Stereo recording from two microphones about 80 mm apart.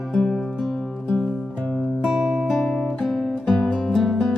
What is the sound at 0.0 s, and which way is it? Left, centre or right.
Music, centre.